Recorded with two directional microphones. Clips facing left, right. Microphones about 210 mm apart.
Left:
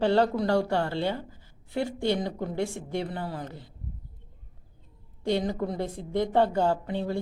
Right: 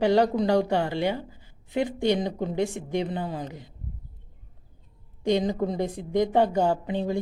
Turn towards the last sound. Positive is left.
turn(degrees=-15)  # may be behind; listen again after turning